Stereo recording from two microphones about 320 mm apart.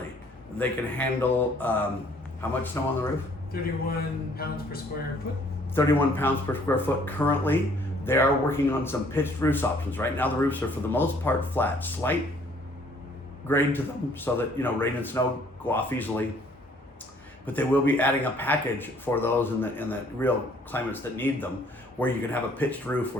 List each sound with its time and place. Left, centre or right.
0.6 s speech: centre
3.5 s speech: left
5.7 s speech: centre
13.5 s speech: centre
17.4 s speech: centre